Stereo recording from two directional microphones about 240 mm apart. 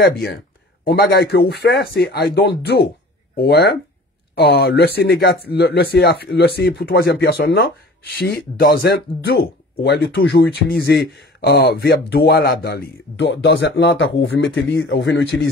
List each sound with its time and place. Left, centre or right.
0.8 s speech: left